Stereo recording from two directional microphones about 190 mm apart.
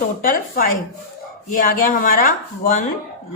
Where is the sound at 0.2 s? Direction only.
50° left (ahead or behind).